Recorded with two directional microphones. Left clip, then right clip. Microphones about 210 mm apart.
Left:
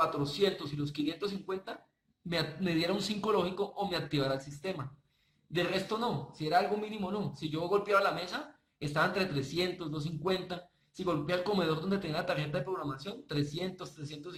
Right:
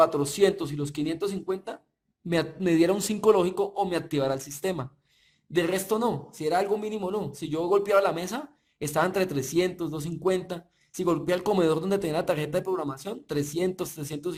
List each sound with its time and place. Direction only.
0.0 s a man's voice: 50° right (ahead or behind)